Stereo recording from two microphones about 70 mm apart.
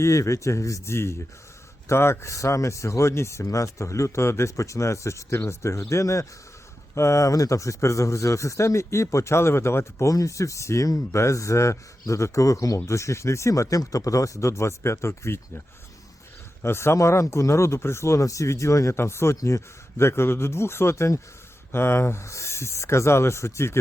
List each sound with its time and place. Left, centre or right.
0.0 s speech: left
16.6 s speech: left